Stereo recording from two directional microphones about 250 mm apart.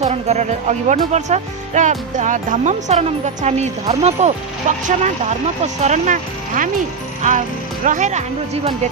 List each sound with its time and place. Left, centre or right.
0.0 s speech: right